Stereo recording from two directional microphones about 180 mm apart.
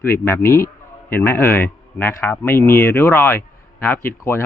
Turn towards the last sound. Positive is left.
turn(degrees=15)  # may be behind; listen again after turning